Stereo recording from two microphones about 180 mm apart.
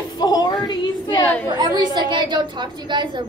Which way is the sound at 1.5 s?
25° right (ahead or behind).